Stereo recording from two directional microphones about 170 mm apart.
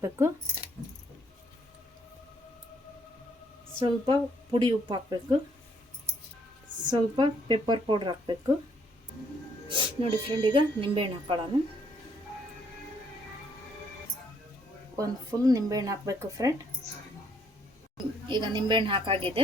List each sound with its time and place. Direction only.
3.8 s speech: 30° right (ahead or behind)
6.8 s speech: 25° right (ahead or behind)
9.6 s speech: 30° right (ahead or behind)
14.9 s speech: 20° right (ahead or behind)
17.9 s speech: 25° right (ahead or behind)